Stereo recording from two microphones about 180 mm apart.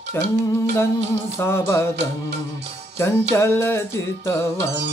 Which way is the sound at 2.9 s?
15° left (ahead or behind).